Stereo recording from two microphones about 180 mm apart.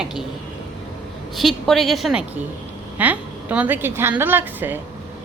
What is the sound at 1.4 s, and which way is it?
A woman's voice, centre (ahead or behind).